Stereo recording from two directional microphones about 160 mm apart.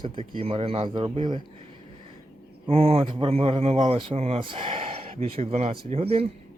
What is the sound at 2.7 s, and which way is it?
Speech, 35° right (ahead or behind).